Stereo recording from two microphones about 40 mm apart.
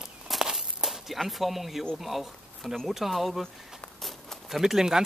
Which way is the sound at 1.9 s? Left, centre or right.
Centre.